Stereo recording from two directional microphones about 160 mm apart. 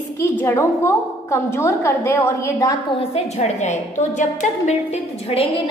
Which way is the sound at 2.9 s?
40° left (ahead or behind).